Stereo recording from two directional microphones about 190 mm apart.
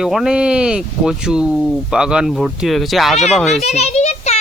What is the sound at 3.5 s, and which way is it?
Speech, 35° left (ahead or behind).